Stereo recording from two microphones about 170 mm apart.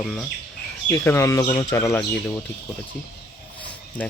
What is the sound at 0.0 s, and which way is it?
Speech, 5° left (ahead or behind).